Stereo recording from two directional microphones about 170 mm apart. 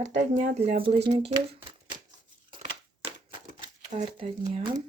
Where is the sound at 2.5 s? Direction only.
35° right (ahead or behind).